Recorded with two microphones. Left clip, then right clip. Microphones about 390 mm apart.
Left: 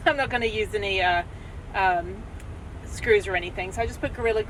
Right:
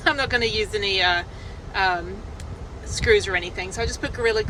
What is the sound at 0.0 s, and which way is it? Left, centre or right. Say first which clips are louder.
Speech: right 2 dB; centre.